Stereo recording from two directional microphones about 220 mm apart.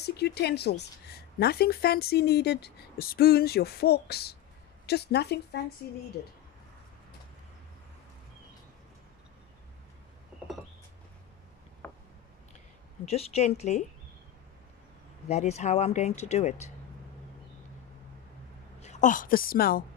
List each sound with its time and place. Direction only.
0.0 s a woman's voice: 45° left (ahead or behind)
11.8 s a sound: 10° left (ahead or behind)
13.0 s a woman's voice: 30° left (ahead or behind)
15.2 s speech: 30° left (ahead or behind)
18.8 s a woman's voice: 30° left (ahead or behind)